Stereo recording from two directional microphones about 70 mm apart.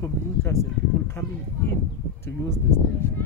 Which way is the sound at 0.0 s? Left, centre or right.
Left.